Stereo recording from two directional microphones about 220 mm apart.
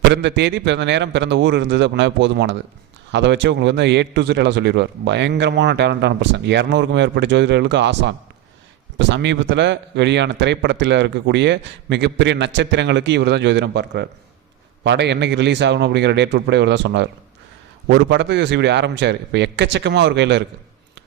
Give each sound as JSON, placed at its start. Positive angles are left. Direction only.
{"t": 0.0, "sound": "a man's voice", "side_deg": -50}